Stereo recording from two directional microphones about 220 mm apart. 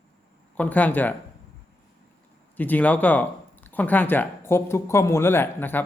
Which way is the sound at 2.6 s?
5° left (ahead or behind).